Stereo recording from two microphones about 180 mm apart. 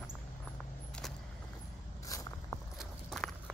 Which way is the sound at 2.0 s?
20° left (ahead or behind).